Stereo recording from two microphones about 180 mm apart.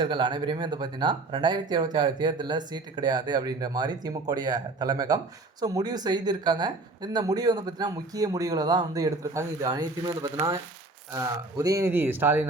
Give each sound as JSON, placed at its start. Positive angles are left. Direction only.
{"t": 0.0, "sound": "speech", "side_deg": -25}